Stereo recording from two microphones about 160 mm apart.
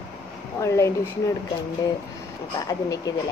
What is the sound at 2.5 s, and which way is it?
Speech, 20° left (ahead or behind).